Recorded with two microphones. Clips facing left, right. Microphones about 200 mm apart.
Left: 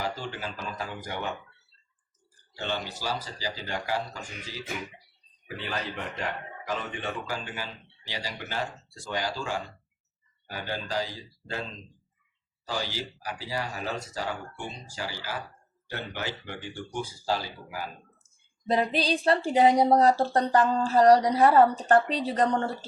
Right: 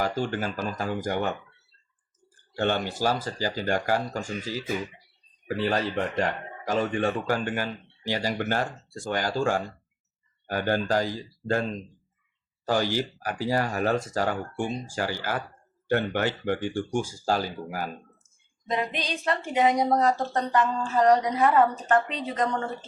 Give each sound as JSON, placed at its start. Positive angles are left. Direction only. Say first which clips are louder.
{"t": 0.0, "sound": "speech", "louder": "right 6 dB", "side_deg": -50}
{"t": 2.3, "sound": "speech", "louder": "right 7 dB", "side_deg": -55}
{"t": 5.5, "sound": "speech", "louder": "right 8 dB", "side_deg": -45}
{"t": 12.6, "sound": "speech", "louder": "right 8 dB", "side_deg": -50}
{"t": 18.7, "sound": "a woman's voice", "louder": "left 4 dB", "side_deg": 35}